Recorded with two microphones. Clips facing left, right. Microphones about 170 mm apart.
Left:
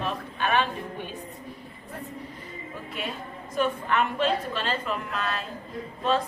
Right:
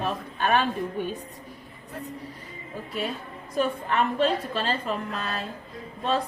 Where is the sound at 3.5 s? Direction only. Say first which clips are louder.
Even; 35° right (ahead or behind).